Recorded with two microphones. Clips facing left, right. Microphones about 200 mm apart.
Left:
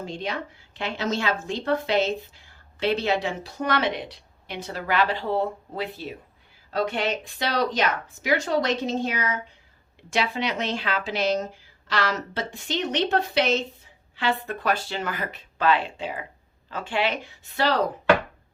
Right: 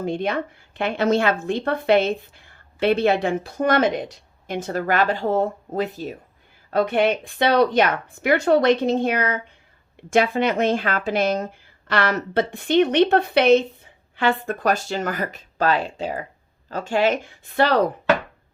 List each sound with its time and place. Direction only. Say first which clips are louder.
0.0 s a woman's voice: right 7 dB; 55° right (ahead or behind)
6.7 s a woman's voice: right 6 dB; 55° right (ahead or behind)